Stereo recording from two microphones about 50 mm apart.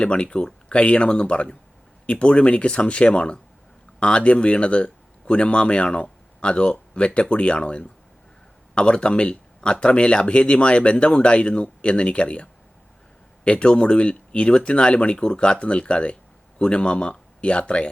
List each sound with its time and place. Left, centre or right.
0.0 s speech: centre